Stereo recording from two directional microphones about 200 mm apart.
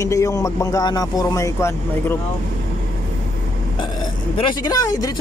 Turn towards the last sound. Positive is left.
turn(degrees=20)  # may be behind; listen again after turning